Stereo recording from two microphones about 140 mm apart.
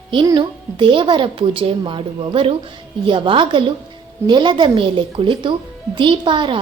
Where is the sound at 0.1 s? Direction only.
35° right (ahead or behind).